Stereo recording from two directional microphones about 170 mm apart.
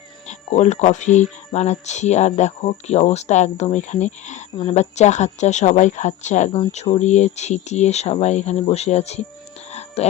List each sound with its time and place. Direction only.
0.3 s speech: 45° left (ahead or behind)
9.7 s whispering: 40° left (ahead or behind)